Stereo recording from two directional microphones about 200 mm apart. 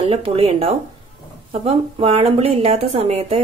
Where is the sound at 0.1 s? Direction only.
30° right (ahead or behind).